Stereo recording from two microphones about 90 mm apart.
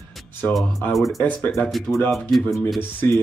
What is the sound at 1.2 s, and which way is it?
Speech, 25° left (ahead or behind).